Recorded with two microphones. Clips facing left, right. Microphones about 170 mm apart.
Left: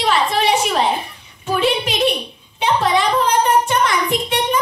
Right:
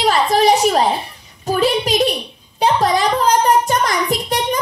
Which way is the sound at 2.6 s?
40° right (ahead or behind).